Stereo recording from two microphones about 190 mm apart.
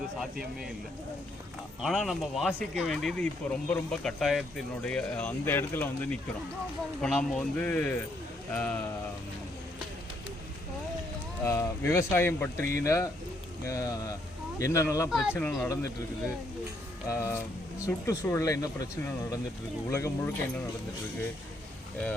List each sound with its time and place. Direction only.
1.8 s speech: centre (ahead or behind)
11.4 s speech: 15° left (ahead or behind)